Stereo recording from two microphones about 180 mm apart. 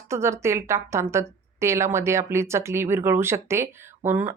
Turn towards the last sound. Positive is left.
turn(degrees=-10)  # may be behind; listen again after turning